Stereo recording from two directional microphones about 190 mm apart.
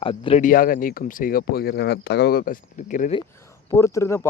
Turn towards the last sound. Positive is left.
turn(degrees=15)  # may be behind; listen again after turning